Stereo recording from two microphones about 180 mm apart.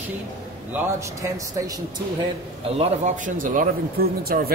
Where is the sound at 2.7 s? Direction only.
40° right (ahead or behind).